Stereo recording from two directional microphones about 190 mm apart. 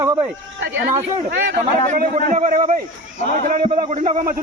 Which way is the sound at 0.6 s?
70° right (ahead or behind).